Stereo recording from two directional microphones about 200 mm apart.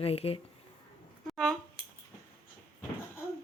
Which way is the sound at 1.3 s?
5° left (ahead or behind).